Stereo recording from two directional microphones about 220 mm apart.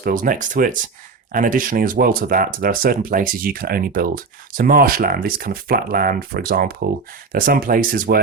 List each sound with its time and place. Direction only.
0.0 s speech: 40° right (ahead or behind)